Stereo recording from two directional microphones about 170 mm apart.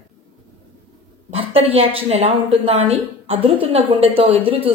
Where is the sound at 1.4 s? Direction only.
35° right (ahead or behind).